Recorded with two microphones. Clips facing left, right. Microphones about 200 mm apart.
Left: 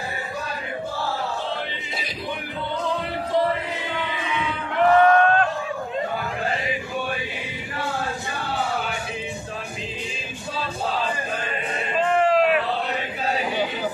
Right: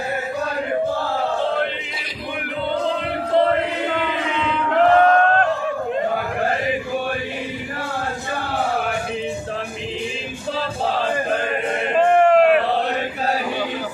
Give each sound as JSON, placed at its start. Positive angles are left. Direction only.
{"t": 3.3, "sound": "chant", "side_deg": -65}
{"t": 11.0, "sound": "chant", "side_deg": -60}
{"t": 11.9, "sound": "a sound", "side_deg": -55}